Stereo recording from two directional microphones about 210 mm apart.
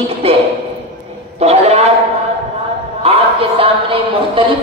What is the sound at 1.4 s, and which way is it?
Speech, 30° right (ahead or behind).